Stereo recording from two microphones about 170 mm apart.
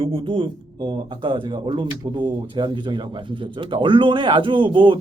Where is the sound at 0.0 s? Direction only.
30° right (ahead or behind).